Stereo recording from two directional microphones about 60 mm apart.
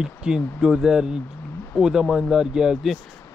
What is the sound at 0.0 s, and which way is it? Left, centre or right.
Speech, centre.